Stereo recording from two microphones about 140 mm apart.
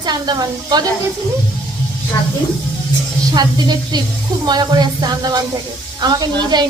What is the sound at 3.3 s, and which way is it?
Speech, 30° right (ahead or behind).